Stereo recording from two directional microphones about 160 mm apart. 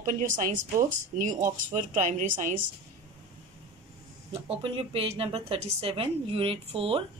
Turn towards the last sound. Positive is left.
turn(degrees=-35)  # may be behind; listen again after turning